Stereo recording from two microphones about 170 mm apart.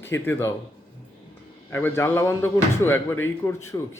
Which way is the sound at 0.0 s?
10° left (ahead or behind).